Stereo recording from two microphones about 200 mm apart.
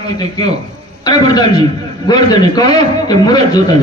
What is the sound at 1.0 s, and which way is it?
A man's voice, 20° left (ahead or behind).